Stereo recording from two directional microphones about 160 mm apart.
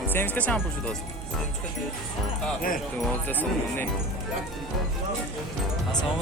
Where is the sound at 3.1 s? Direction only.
10° left (ahead or behind).